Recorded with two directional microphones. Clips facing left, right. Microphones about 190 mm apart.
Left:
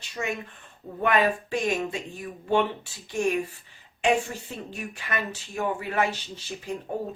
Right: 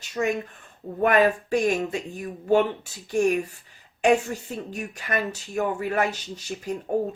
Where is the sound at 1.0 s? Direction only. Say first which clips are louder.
Right 4 dB; 45° right (ahead or behind).